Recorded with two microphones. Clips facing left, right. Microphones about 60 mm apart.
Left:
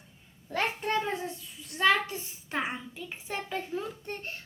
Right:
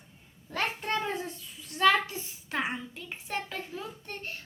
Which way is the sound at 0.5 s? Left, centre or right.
Centre.